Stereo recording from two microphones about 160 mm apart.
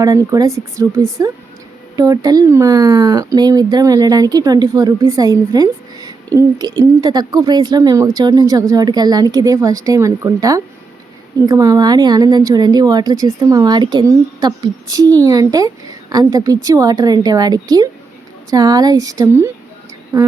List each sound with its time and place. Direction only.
0.0 s a woman's voice: 20° right (ahead or behind)